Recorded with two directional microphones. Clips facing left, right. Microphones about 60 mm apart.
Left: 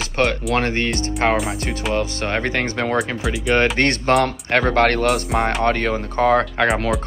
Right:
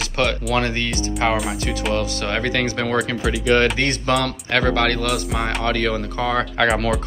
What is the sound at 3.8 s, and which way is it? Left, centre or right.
Speech, left.